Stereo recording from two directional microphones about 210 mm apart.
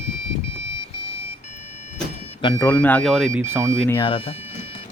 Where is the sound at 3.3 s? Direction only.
10° right (ahead or behind).